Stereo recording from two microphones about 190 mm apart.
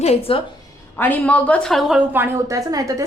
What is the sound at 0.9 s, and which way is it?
A woman's voice, 10° left (ahead or behind).